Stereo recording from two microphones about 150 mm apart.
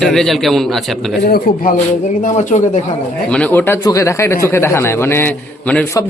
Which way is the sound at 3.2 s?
10° left (ahead or behind).